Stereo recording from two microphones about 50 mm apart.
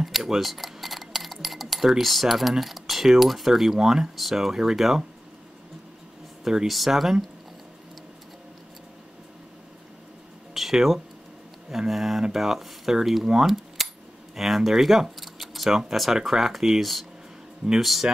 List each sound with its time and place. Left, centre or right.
0.0 s speech: centre
6.4 s speech: centre
10.5 s a sound: centre
11.7 s speech: centre